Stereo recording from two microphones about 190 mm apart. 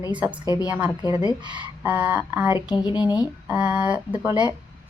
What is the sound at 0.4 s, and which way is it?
Speech, 20° left (ahead or behind).